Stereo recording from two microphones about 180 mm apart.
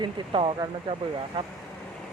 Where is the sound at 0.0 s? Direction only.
25° right (ahead or behind).